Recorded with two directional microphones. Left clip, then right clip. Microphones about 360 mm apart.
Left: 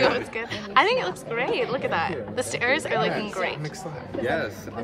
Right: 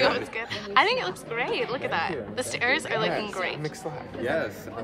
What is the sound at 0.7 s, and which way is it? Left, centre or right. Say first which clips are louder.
A woman's voice: left 2 dB; centre.